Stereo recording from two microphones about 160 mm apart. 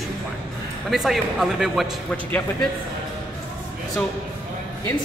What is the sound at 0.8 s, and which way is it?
A man's voice, centre (ahead or behind).